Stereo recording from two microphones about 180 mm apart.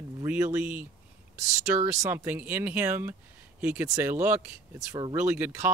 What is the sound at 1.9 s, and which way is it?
Speech, 15° right (ahead or behind).